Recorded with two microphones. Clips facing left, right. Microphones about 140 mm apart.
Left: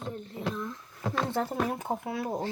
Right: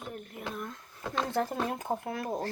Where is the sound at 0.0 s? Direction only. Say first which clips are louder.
Left 4 dB; 25° left (ahead or behind).